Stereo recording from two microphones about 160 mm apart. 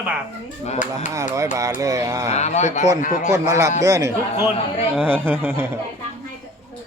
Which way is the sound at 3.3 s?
20° right (ahead or behind).